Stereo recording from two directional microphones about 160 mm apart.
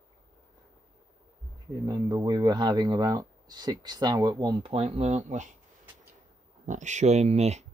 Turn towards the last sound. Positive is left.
turn(degrees=-45)  # may be behind; listen again after turning